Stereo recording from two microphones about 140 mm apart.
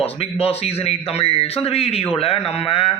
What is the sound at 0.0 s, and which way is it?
Speech, 45° left (ahead or behind).